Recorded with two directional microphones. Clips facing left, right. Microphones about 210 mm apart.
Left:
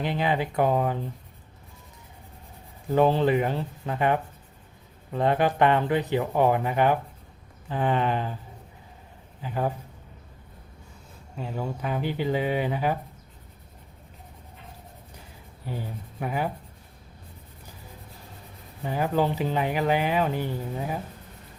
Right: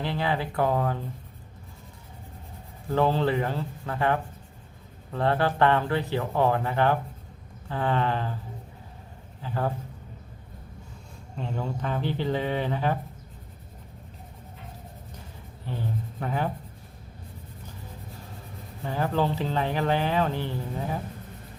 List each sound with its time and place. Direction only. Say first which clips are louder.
0.0 s speech: left 2 dB; 20° left (ahead or behind)
2.9 s speech: left 3 dB; 15° left (ahead or behind)
9.4 s speech: left 1 dB; 15° left (ahead or behind)
11.3 s speech: even; 5° left (ahead or behind)
15.6 s speech: right 2 dB; 10° left (ahead or behind)
18.8 s speech: left 2 dB; 15° left (ahead or behind)